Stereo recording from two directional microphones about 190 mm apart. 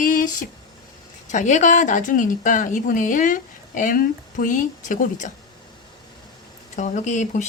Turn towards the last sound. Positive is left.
turn(degrees=40)  # may be behind; listen again after turning